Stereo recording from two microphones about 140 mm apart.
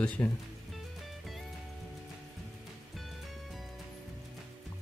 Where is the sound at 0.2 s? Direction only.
20° left (ahead or behind).